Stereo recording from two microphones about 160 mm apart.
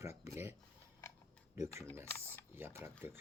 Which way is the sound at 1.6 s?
15° right (ahead or behind).